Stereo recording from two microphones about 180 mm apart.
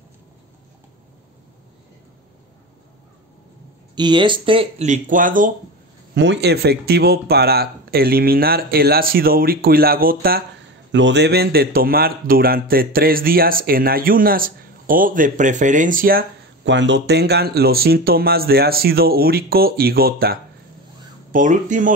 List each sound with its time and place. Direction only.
3.9 s speech: 25° right (ahead or behind); by 5.5 s 50° right (ahead or behind)
6.1 s speech: 75° right (ahead or behind); by 10.4 s 55° right (ahead or behind)
10.9 s a man's voice: 80° right; by 16.3 s 50° right (ahead or behind)
16.6 s speech: 80° right; by 20.3 s 55° right (ahead or behind)
21.3 s a man's voice: 45° right (ahead or behind)